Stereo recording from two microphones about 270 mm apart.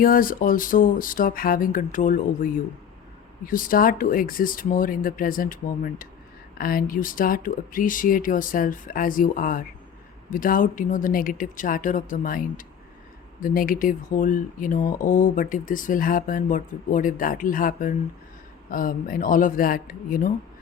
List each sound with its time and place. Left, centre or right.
0.0 s speech: left